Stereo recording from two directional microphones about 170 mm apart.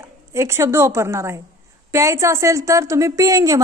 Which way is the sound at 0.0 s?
15° right (ahead or behind).